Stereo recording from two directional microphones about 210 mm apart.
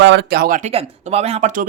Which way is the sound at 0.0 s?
55° right (ahead or behind).